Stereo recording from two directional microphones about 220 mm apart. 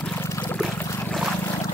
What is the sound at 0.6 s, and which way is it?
Boat, centre (ahead or behind).